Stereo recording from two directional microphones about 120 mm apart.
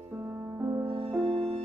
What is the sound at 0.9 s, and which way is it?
Music, 55° right (ahead or behind).